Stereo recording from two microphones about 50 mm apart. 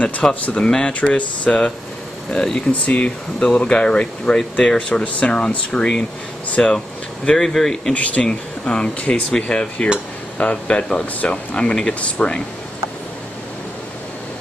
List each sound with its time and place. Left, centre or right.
0.0 s speech: left
1.1 s speech: left
2.3 s speech: centre
2.9 s speech: left; by 7.9 s centre
7.9 s speech: left